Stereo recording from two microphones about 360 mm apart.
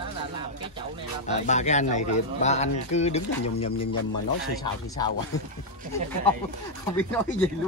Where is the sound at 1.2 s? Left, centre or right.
Centre.